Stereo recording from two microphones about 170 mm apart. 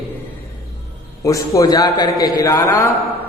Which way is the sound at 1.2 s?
20° left (ahead or behind).